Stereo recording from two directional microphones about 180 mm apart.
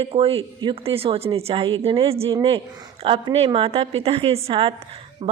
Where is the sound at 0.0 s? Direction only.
30° right (ahead or behind).